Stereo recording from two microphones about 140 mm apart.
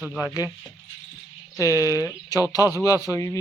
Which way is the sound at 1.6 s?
25° left (ahead or behind).